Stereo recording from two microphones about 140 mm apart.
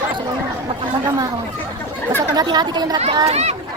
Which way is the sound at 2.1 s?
30° right (ahead or behind).